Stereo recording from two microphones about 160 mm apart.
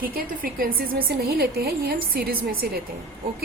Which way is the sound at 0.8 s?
70° right (ahead or behind).